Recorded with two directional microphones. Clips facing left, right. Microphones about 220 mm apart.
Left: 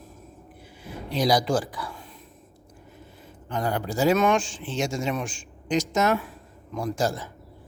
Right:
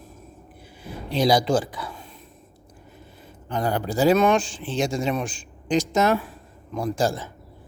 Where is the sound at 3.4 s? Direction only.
35° right (ahead or behind).